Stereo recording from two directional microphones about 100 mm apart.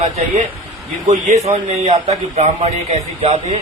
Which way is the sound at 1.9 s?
90° right.